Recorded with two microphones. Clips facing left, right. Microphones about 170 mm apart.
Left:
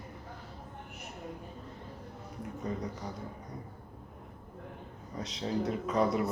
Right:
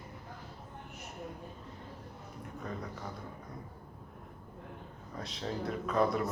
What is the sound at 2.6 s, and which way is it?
Speech, 20° left (ahead or behind).